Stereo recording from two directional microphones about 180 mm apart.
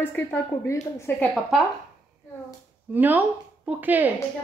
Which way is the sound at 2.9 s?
10° right (ahead or behind).